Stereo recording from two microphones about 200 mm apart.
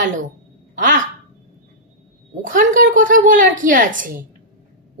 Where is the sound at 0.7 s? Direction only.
40° right (ahead or behind).